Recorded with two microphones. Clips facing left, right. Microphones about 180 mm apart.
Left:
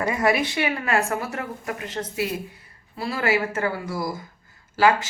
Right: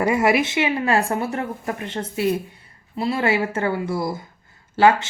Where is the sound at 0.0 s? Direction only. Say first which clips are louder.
Right 4 dB; 25° right (ahead or behind).